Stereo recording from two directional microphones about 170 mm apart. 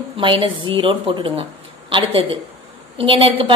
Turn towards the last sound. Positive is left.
turn(degrees=-30)  # may be behind; listen again after turning